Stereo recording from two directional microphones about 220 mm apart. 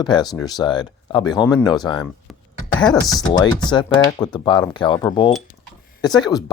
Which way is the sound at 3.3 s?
20° left (ahead or behind).